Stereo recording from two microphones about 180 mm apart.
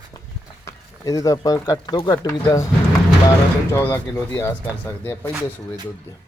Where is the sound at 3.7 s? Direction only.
15° left (ahead or behind).